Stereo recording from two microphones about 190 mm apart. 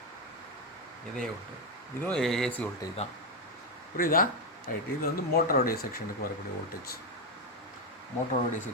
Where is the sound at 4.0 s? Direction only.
50° left (ahead or behind).